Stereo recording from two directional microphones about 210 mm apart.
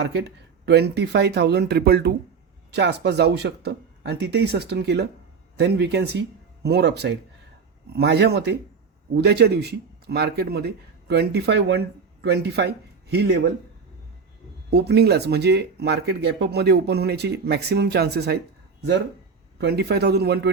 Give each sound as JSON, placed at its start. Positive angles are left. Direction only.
{"t": 0.0, "sound": "speech", "side_deg": -55}
{"t": 14.7, "sound": "speech", "side_deg": -50}
{"t": 19.5, "sound": "speech", "side_deg": -50}